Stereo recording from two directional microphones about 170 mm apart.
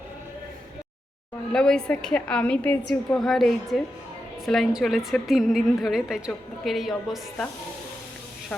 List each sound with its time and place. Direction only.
1.5 s a woman's voice: 5° left (ahead or behind)